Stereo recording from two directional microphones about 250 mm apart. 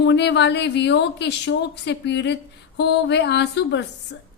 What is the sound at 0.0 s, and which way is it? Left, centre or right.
Speech, left.